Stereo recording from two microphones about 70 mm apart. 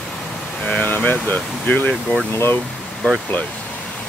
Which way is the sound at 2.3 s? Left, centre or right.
Left.